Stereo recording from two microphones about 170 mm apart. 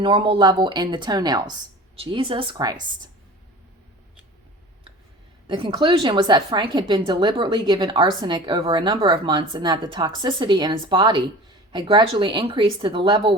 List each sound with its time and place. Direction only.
0.0 s a woman's voice: 30° right (ahead or behind)
5.5 s a woman's voice: 30° right (ahead or behind)